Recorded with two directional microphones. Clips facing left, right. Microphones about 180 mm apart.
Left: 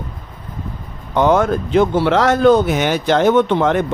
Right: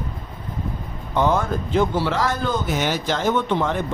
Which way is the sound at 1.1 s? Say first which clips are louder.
Left 6 dB; 75° left (ahead or behind).